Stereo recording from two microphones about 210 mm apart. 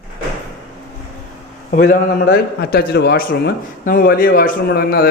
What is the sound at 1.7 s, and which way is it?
A man's voice, 40° left (ahead or behind).